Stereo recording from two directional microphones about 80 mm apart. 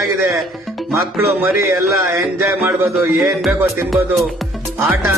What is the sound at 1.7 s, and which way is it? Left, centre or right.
Music, right.